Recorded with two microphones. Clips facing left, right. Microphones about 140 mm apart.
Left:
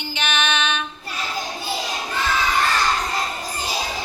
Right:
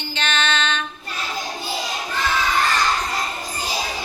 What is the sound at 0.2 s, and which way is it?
Music, 15° left (ahead or behind).